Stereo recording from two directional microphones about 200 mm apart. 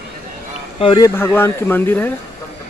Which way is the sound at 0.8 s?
20° left (ahead or behind).